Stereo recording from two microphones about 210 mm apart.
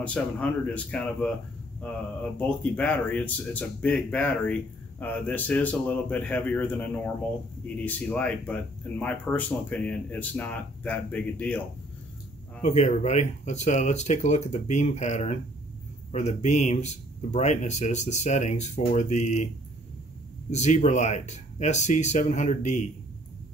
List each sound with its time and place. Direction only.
0.0 s speech: 5° left (ahead or behind)
12.6 s speech: 35° left (ahead or behind)
20.5 s speech: 35° left (ahead or behind)